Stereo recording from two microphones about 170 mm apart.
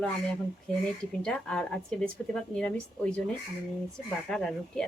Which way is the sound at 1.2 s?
5° left (ahead or behind).